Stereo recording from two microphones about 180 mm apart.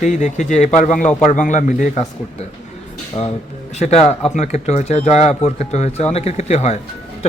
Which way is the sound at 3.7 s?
40° left (ahead or behind).